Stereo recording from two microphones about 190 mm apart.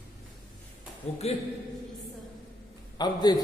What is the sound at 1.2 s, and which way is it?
Speech, 35° left (ahead or behind).